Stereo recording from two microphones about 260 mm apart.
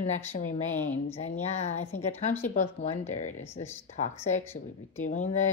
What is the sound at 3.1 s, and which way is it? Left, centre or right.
Speech, left.